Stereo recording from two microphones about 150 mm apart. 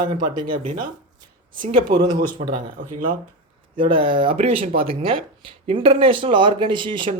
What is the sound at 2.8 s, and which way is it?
Speech, 60° right (ahead or behind).